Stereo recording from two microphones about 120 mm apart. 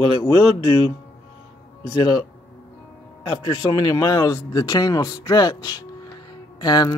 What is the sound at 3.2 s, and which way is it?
Speech, 40° left (ahead or behind).